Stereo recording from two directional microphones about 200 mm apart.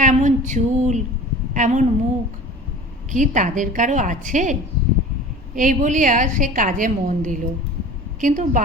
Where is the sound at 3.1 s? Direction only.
40° right (ahead or behind).